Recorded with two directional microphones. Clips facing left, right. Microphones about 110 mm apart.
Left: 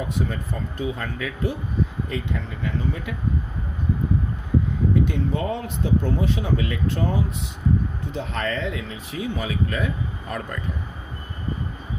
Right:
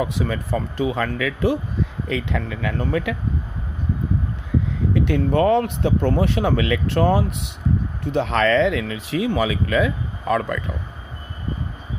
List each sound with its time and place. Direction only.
0.0 s speech: 90° right
4.9 s speech: 70° right (ahead or behind); by 10.6 s 90° right